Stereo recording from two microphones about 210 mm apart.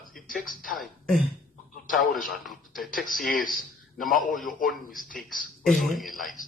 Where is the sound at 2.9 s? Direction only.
40° left (ahead or behind).